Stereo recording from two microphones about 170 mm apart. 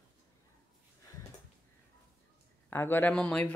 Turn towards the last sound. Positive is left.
turn(degrees=5)  # may be behind; listen again after turning